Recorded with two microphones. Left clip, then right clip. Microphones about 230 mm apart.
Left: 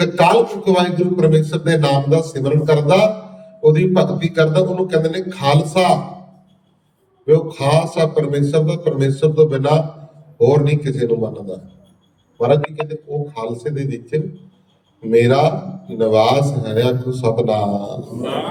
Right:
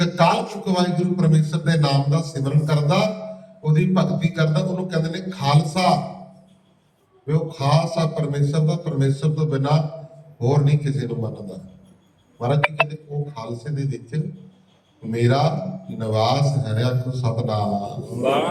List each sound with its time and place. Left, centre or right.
0.0 s a man's voice: left
7.3 s a man's voice: left
12.4 s a man's voice: left